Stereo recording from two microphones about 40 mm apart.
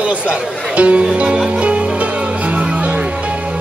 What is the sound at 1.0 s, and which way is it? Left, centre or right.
Music, right.